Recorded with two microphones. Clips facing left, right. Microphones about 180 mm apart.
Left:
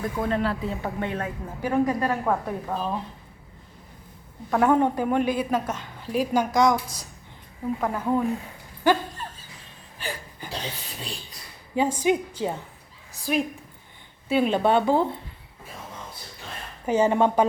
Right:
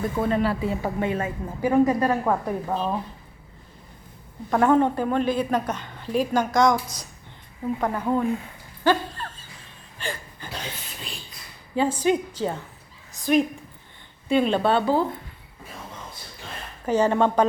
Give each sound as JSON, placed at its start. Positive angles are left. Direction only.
{"t": 0.0, "sound": "a woman's voice", "side_deg": -5}
{"t": 4.4, "sound": "a woman's voice", "side_deg": 5}
{"t": 8.8, "sound": "dog", "side_deg": 15}
{"t": 10.0, "sound": "a sound", "side_deg": 10}
{"t": 12.0, "sound": "a woman's voice", "side_deg": 10}
{"t": 16.8, "sound": "a woman's voice", "side_deg": 10}